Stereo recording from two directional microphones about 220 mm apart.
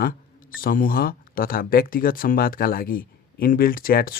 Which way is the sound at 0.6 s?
40° left (ahead or behind).